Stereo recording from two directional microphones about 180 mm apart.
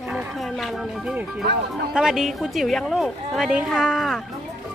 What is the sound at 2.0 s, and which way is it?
A woman's voice, 5° right (ahead or behind).